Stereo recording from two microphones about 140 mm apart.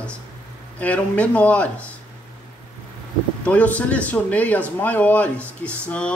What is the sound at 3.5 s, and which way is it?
Speech, 10° left (ahead or behind).